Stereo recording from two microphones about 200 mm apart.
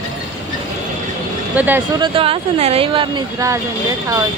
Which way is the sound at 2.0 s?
25° right (ahead or behind).